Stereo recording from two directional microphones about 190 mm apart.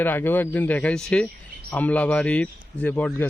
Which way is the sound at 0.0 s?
10° left (ahead or behind).